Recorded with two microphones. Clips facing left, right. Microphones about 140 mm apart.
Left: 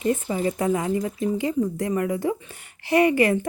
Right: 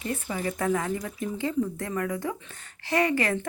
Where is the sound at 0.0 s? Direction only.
20° left (ahead or behind).